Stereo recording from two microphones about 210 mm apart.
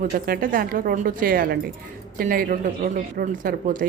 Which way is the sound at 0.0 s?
40° right (ahead or behind).